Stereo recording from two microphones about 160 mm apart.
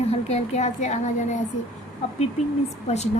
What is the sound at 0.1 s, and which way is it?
Speech, 40° left (ahead or behind).